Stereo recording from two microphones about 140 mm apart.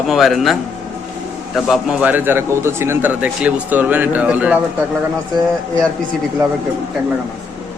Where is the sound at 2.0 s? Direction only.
10° right (ahead or behind).